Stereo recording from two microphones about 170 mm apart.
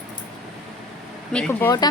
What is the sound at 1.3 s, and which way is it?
Speech, 10° left (ahead or behind).